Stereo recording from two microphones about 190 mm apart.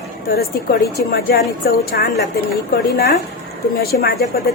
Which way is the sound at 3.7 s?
55° left (ahead or behind).